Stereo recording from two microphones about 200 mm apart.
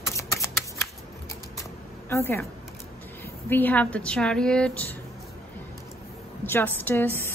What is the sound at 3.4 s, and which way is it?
Speech, 10° left (ahead or behind).